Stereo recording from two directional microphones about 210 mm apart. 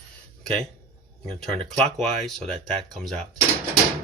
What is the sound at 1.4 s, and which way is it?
Speech, 5° left (ahead or behind).